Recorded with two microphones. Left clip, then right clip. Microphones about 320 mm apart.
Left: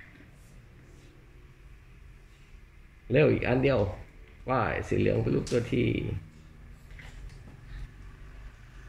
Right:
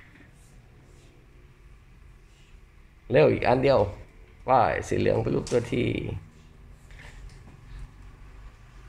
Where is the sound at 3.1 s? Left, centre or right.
Centre.